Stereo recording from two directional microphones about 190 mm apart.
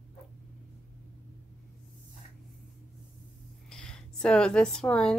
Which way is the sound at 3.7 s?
5° left (ahead or behind).